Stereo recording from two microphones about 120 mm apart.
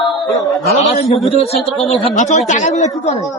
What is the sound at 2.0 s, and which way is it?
Speech, 75° left (ahead or behind).